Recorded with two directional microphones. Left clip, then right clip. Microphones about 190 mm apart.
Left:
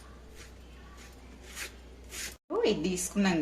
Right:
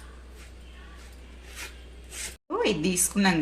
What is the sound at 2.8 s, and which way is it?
Speech, 40° right (ahead or behind).